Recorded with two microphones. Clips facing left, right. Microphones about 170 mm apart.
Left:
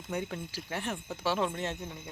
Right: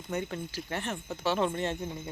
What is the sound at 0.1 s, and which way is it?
Speech, 5° left (ahead or behind).